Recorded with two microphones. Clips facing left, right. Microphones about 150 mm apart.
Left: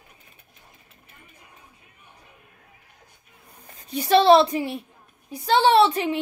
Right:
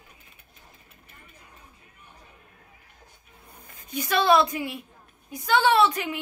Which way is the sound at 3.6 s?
35° left (ahead or behind).